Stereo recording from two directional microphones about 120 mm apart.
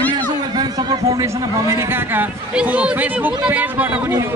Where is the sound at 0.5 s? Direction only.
30° right (ahead or behind).